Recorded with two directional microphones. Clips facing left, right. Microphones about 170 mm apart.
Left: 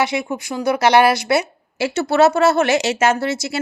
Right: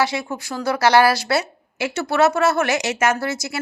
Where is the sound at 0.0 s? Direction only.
20° left (ahead or behind).